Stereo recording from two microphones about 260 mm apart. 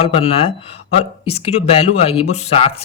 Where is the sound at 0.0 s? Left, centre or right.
Left.